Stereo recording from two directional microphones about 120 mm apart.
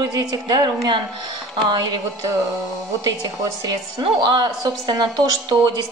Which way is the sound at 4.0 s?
35° right (ahead or behind).